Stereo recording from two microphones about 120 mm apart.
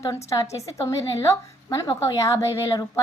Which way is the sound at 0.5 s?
25° left (ahead or behind).